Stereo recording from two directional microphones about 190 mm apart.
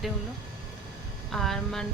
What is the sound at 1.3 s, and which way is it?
Speech, centre (ahead or behind).